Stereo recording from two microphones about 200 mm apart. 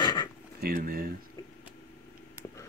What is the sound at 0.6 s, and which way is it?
Speech, 45° right (ahead or behind).